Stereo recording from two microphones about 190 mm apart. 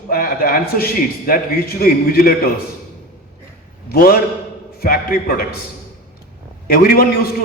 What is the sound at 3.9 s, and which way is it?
A man's voice, 50° left (ahead or behind).